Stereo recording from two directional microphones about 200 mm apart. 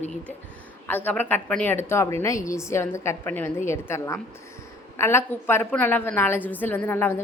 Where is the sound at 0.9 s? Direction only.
10° left (ahead or behind).